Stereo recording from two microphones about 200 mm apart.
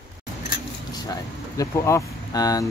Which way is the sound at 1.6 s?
15° left (ahead or behind).